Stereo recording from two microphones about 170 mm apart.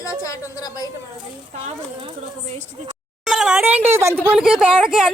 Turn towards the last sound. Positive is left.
turn(degrees=-5)  # may be behind; listen again after turning